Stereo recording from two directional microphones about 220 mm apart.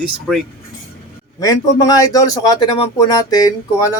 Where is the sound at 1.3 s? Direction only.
15° left (ahead or behind).